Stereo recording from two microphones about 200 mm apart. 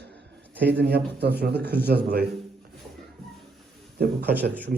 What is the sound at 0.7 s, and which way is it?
Speech, 55° right (ahead or behind).